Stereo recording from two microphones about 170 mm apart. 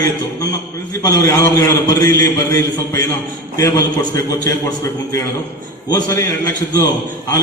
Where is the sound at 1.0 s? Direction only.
20° left (ahead or behind).